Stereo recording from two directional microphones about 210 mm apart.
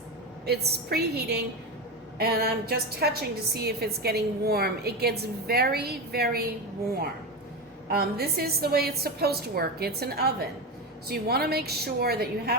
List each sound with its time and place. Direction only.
0.4 s a woman's voice: 50° right (ahead or behind)
7.9 s a woman's voice: 50° right (ahead or behind)